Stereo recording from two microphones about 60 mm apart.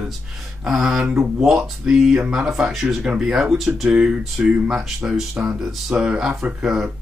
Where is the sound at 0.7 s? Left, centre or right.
Centre.